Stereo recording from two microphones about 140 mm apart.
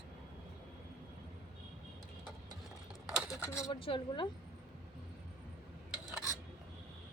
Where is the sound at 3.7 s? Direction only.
40° left (ahead or behind).